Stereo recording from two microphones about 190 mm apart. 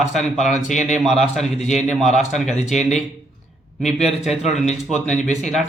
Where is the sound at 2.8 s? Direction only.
40° left (ahead or behind).